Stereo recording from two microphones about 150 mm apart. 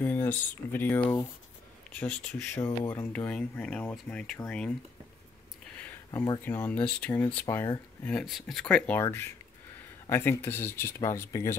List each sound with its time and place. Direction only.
0.0 s speech: 10° left (ahead or behind)
6.1 s speech: 25° left (ahead or behind)
6.4 s speech: 15° left (ahead or behind)
8.1 s speech: centre (ahead or behind); by 11.5 s 20° left (ahead or behind)